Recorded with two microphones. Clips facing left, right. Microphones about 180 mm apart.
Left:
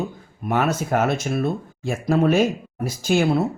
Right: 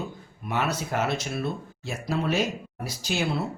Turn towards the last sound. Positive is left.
turn(degrees=50)  # may be behind; listen again after turning